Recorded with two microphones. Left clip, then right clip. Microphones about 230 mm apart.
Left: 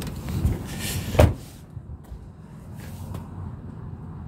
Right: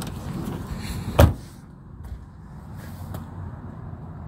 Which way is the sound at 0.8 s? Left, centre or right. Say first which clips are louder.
Left 3 dB; left.